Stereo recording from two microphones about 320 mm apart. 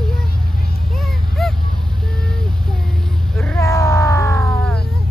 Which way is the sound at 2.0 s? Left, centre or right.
Centre.